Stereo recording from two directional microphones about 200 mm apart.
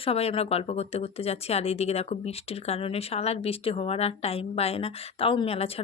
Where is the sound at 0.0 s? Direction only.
30° left (ahead or behind).